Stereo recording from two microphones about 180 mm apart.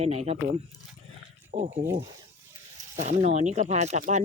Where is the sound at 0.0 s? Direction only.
35° right (ahead or behind).